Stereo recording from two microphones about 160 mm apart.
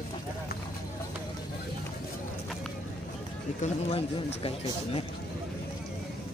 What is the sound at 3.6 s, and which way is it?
Speech, 40° left (ahead or behind).